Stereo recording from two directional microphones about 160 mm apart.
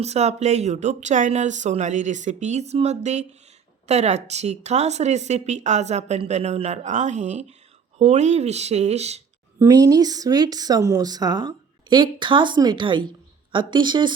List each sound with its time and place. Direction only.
0.0 s speech: 45° right (ahead or behind)
9.6 s speech: 20° right (ahead or behind)